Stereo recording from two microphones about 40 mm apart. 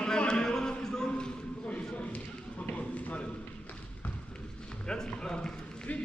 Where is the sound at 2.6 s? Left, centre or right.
Left.